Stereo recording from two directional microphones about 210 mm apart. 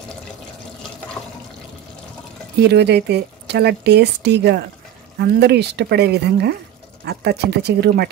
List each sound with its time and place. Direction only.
2.6 s speech: 55° right (ahead or behind)